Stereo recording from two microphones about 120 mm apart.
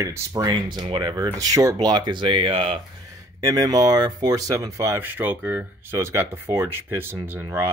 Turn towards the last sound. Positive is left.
turn(degrees=-20)  # may be behind; listen again after turning